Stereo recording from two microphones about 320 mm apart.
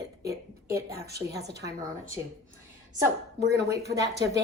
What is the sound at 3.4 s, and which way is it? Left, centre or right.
Speech, right.